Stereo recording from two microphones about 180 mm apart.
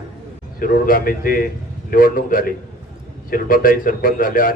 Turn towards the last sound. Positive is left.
turn(degrees=50)  # may be behind; listen again after turning